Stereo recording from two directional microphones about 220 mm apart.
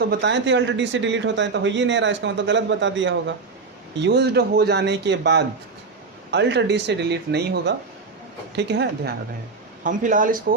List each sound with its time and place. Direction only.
0.0 s speech: 50° right (ahead or behind)
9.8 s speech: 35° right (ahead or behind)